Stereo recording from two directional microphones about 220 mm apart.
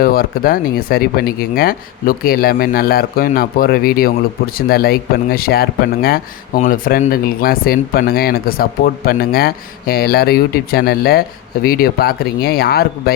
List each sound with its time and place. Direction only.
0.0 s speech: 40° left (ahead or behind)